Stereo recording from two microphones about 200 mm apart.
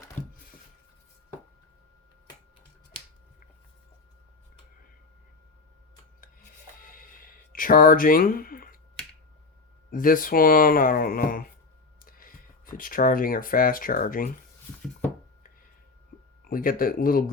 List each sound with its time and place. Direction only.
6.7 s a sound: 45° left (ahead or behind)
9.9 s speech: 45° left (ahead or behind)
16.4 s speech: 45° left (ahead or behind)